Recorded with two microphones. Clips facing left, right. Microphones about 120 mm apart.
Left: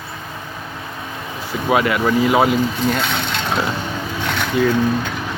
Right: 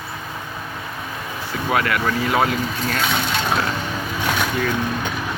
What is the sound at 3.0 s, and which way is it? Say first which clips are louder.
Speech: right 1 dB; 5° right (ahead or behind).